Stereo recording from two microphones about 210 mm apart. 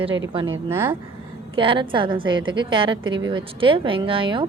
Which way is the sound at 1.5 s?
25° right (ahead or behind).